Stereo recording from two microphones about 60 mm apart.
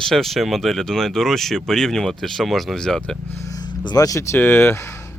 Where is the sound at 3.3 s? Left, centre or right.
Left.